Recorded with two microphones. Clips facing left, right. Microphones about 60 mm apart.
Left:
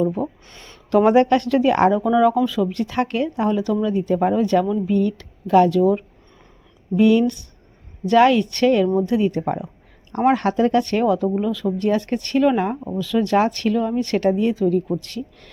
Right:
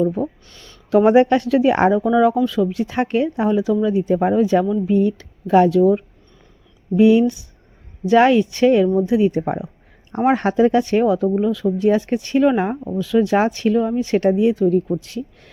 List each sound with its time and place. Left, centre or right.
0.2 s speech: centre
0.5 s a sound: left
0.9 s speech: centre
2.8 s speech: right
5.7 s speech: centre
6.9 s speech: centre